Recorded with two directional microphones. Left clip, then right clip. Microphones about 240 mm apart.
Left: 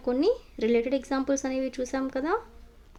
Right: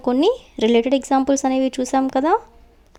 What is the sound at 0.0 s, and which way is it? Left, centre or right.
Speech, right.